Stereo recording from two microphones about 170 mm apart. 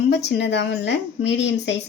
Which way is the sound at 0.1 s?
90° left.